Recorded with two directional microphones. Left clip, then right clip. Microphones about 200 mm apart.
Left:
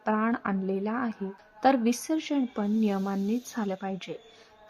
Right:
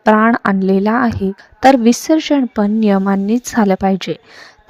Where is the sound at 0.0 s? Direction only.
45° right (ahead or behind).